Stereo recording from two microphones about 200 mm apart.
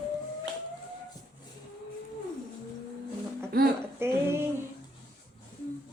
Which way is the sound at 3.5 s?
50° right (ahead or behind).